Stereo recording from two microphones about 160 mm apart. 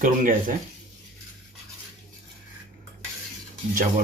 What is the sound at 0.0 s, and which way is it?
Speech, 55° right (ahead or behind).